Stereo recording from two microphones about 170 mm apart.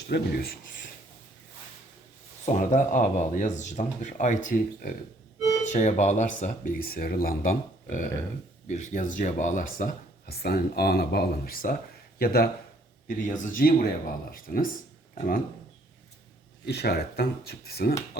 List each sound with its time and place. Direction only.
0.1 s speech: 65° left (ahead or behind)
2.5 s speech: 45° left (ahead or behind)
5.6 s speech: 45° left (ahead or behind)
6.8 s speech: 60° left (ahead or behind)
13.1 s speech: 50° left (ahead or behind)
16.6 s speech: 70° left (ahead or behind)